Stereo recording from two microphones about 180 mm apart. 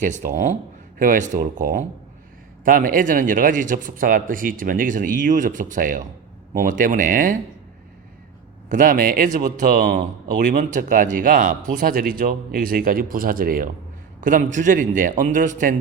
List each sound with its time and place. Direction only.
0.0 s speech: 45° right (ahead or behind)
8.7 s speech: 50° right (ahead or behind)